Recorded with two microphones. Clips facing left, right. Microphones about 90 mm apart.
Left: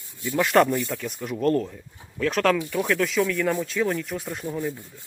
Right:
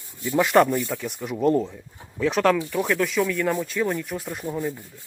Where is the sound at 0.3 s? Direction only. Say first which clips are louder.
Right 1 dB; 5° right (ahead or behind).